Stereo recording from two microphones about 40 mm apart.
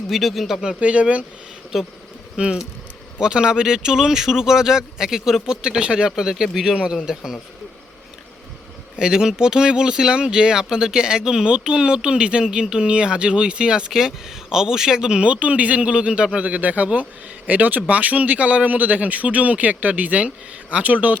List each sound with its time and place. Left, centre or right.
0.1 s speech: centre
0.8 s speech: right
1.7 s speech: centre
2.4 s speech: centre
9.0 s speech: centre
15.2 s speech: right
16.5 s speech: right